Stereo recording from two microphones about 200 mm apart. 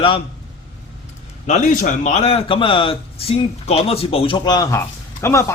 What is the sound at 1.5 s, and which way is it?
A man's voice, 35° left (ahead or behind).